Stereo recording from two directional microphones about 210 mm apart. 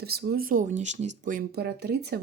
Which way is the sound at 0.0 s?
50° right (ahead or behind).